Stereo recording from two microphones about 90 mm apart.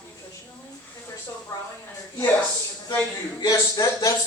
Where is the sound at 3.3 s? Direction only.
45° left (ahead or behind).